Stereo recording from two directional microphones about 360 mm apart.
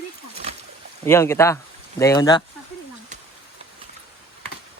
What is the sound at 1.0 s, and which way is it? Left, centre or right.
Speech, centre.